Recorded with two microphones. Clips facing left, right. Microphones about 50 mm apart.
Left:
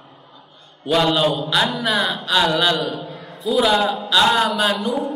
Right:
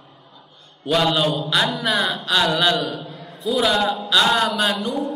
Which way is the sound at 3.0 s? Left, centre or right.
Left.